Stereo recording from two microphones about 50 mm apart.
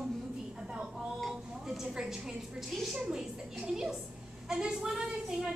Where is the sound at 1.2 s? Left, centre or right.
Centre.